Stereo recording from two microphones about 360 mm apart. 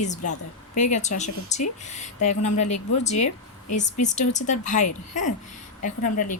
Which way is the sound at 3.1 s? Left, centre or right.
Left.